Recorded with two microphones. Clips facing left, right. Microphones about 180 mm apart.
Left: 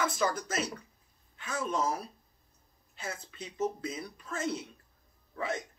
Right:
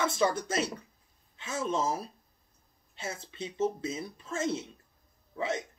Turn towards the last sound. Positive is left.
turn(degrees=-25)  # may be behind; listen again after turning